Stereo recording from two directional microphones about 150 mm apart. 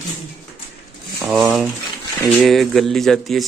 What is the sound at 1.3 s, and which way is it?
Speech, centre (ahead or behind).